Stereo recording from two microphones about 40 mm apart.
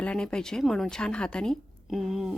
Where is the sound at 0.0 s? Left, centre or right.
Left.